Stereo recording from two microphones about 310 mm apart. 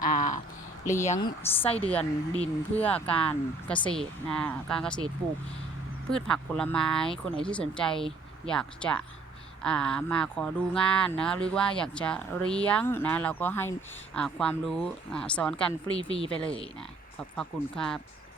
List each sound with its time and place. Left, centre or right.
0.0 s a sound: left
1.0 s a woman's voice: centre
1.8 s speech: centre